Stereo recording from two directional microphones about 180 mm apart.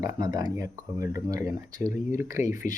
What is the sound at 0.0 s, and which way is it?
Speech, 20° right (ahead or behind).